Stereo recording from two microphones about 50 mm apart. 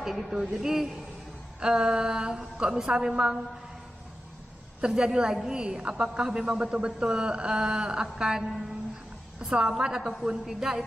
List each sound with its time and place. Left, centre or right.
0.0 s speech: centre
4.8 s speech: centre